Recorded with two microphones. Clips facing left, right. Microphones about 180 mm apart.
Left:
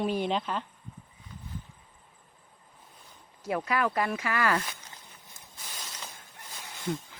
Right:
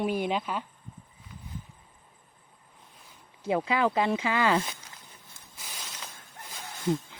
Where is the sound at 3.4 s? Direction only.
25° right (ahead or behind).